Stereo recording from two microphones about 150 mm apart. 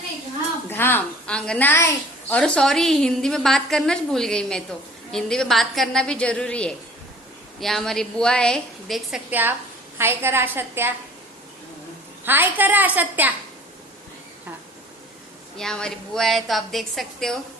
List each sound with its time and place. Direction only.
0.7 s a woman's voice: 15° left (ahead or behind); by 10.9 s 15° right (ahead or behind)
12.2 s a woman's voice: 15° right (ahead or behind)
15.5 s a woman's voice: 5° left (ahead or behind)